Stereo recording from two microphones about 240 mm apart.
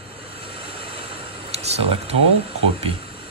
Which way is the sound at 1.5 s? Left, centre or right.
Right.